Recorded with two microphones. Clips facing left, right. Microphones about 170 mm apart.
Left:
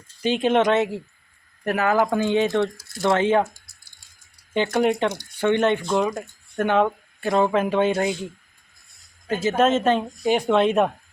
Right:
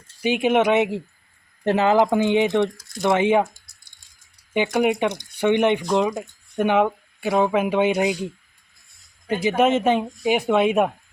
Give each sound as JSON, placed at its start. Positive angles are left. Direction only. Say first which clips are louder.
{"t": 0.2, "sound": "speech", "louder": "right 1 dB", "side_deg": -10}
{"t": 3.4, "sound": "a sound", "louder": "even", "side_deg": 0}
{"t": 4.5, "sound": "speech", "louder": "even", "side_deg": -10}
{"t": 9.2, "sound": "speech", "louder": "right 1 dB", "side_deg": -15}